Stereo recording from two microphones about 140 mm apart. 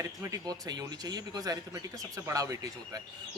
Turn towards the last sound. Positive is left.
turn(degrees=-25)  # may be behind; listen again after turning